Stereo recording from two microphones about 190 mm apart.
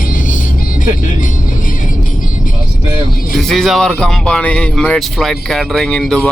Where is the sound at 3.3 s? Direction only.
Centre (ahead or behind).